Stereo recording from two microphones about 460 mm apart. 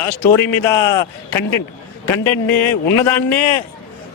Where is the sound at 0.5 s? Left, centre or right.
Left.